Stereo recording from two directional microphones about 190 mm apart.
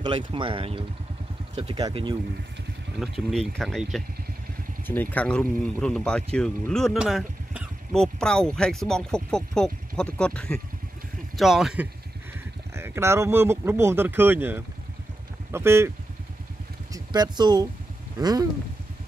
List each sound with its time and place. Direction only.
0.0 s speech: 25° right (ahead or behind)
3.0 s speech: centre (ahead or behind)
16.9 s speech: 20° right (ahead or behind)